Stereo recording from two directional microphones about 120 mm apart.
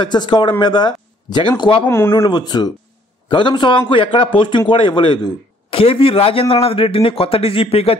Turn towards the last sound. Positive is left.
turn(degrees=55)  # may be behind; listen again after turning